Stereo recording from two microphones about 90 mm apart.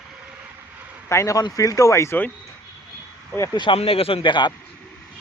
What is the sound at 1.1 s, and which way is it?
Speech, 35° left (ahead or behind).